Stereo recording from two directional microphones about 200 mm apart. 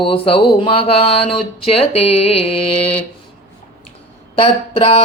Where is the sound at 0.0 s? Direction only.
25° left (ahead or behind).